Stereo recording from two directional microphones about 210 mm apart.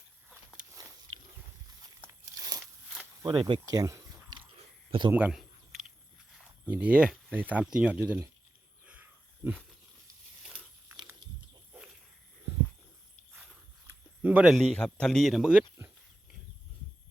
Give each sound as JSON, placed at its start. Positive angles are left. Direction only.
{"t": 3.2, "sound": "speech", "side_deg": -20}
{"t": 4.5, "sound": "a sound", "side_deg": -25}
{"t": 5.1, "sound": "speech", "side_deg": -5}
{"t": 6.7, "sound": "speech", "side_deg": -5}
{"t": 8.9, "sound": "wild animals", "side_deg": -5}
{"t": 10.4, "sound": "a sound", "side_deg": -5}
{"t": 14.2, "sound": "speech", "side_deg": -5}